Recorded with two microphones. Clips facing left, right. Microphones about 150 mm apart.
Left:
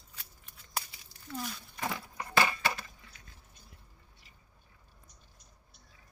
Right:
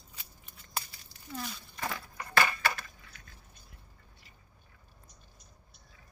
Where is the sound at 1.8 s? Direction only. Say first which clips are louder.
Left 1 dB; 15° left (ahead or behind).